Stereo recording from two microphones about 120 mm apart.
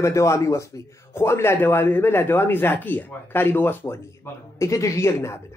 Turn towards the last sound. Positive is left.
turn(degrees=20)  # may be behind; listen again after turning